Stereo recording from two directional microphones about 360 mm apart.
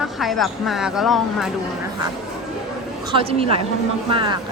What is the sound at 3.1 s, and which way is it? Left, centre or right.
A woman's voice, centre.